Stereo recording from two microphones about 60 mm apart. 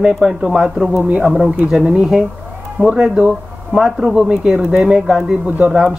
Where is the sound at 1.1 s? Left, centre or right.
Centre.